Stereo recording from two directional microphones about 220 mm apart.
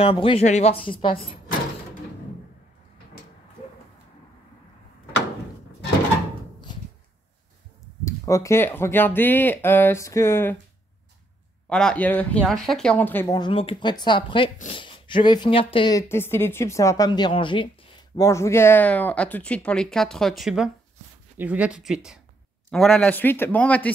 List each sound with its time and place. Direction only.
0.0 s speech: 25° left (ahead or behind)
8.0 s speech: 15° left (ahead or behind)
11.7 s speech: 5° left (ahead or behind)
13.3 s speech: 20° left (ahead or behind); by 23.9 s 5° left (ahead or behind)